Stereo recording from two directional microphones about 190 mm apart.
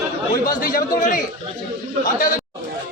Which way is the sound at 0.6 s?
50° left (ahead or behind).